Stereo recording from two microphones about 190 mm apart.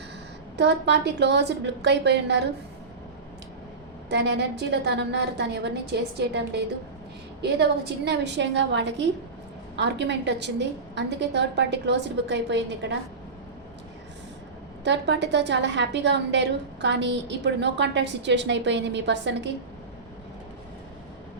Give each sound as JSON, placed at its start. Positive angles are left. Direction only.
{"t": 0.5, "sound": "a woman's voice", "side_deg": -65}
{"t": 4.1, "sound": "a woman's voice", "side_deg": -65}
{"t": 14.8, "sound": "a woman's voice", "side_deg": -65}